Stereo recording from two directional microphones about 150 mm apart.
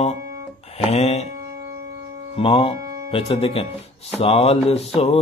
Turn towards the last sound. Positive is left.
turn(degrees=45)  # may be behind; listen again after turning